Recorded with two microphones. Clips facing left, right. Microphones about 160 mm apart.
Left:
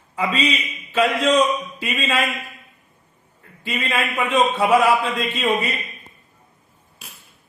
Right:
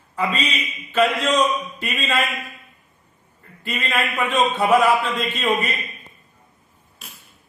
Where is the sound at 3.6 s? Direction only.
Centre (ahead or behind).